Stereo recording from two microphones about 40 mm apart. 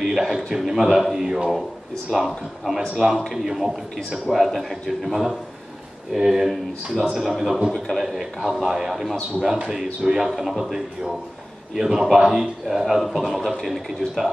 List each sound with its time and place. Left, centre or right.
0.0 s a man's voice: centre